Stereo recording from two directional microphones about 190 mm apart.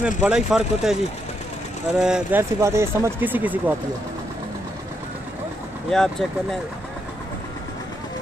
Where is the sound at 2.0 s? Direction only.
5° right (ahead or behind).